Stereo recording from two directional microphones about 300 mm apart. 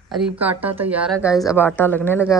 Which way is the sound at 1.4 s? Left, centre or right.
Centre.